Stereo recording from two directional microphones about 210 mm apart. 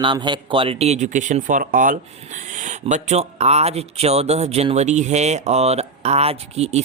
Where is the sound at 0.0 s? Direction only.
20° right (ahead or behind).